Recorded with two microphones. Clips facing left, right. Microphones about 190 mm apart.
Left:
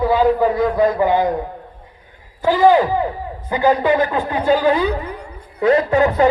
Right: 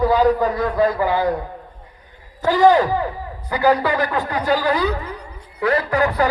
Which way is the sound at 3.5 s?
20° left (ahead or behind).